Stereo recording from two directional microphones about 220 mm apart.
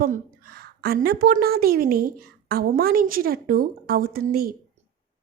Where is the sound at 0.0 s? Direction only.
40° right (ahead or behind).